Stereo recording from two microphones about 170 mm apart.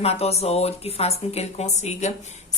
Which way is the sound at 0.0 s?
35° left (ahead or behind).